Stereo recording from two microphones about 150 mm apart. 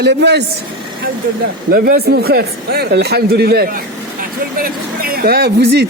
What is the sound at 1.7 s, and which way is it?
A man's voice, 90° right.